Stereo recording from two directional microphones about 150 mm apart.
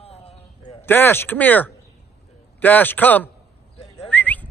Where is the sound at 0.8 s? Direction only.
15° left (ahead or behind).